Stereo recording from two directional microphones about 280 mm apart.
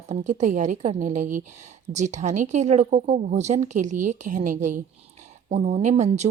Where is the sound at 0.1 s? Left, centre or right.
Right.